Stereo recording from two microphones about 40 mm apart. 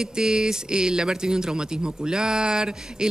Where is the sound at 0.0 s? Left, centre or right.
Centre.